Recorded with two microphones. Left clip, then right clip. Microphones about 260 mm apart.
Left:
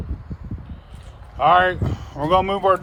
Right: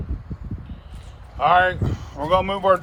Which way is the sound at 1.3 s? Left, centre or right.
Left.